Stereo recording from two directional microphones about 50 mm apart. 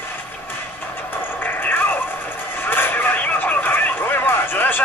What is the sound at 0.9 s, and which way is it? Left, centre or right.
Vehicle, left.